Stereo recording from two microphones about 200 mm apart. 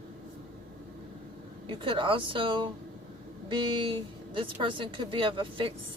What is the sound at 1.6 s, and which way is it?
Speech, 25° right (ahead or behind).